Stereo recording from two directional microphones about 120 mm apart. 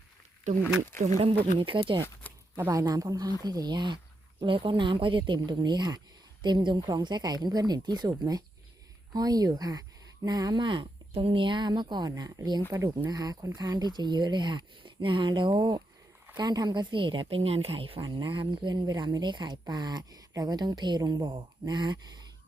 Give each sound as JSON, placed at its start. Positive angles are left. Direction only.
{"t": 0.5, "sound": "speech", "side_deg": -90}
{"t": 1.5, "sound": "a woman's voice", "side_deg": -45}
{"t": 2.3, "sound": "a sound", "side_deg": 15}
{"t": 2.6, "sound": "a woman's voice", "side_deg": -30}